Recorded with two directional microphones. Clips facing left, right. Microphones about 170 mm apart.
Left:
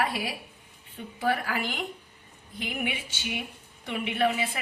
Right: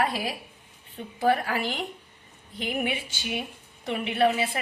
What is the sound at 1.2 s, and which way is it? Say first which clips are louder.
Speech: right 4 dB; 35° right (ahead or behind).